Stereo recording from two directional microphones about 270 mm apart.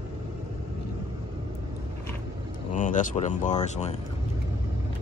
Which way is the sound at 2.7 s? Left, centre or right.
Left.